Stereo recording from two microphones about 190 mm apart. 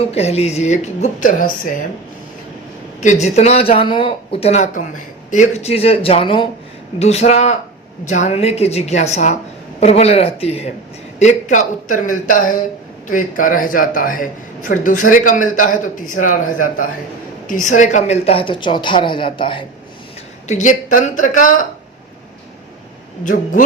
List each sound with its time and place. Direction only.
0.1 s speech: 35° left (ahead or behind)
3.0 s a woman's voice: 40° left (ahead or behind)
20.5 s speech: 40° left (ahead or behind)
23.2 s speech: 45° left (ahead or behind)